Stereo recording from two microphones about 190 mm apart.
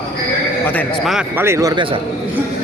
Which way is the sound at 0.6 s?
5° left (ahead or behind).